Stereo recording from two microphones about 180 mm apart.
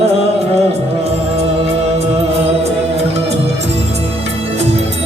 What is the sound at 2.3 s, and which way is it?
Music, 35° right (ahead or behind).